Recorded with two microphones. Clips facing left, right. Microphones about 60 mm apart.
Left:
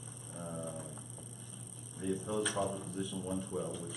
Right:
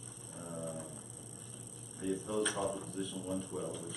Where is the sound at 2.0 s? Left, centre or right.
Centre.